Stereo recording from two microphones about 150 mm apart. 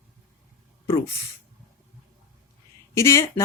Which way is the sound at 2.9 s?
20° left (ahead or behind).